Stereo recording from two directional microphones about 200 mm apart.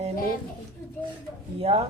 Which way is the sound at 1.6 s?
30° right (ahead or behind).